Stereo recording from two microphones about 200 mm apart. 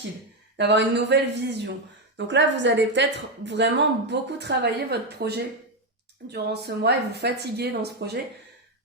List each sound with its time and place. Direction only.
0.5 s speech: 60° right (ahead or behind)